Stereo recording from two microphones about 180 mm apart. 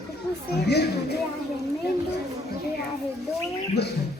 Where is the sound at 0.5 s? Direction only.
65° left (ahead or behind).